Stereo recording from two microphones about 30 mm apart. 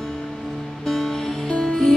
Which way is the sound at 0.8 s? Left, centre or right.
Centre.